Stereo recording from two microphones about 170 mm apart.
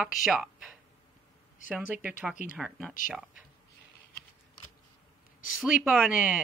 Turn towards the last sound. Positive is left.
turn(degrees=-5)  # may be behind; listen again after turning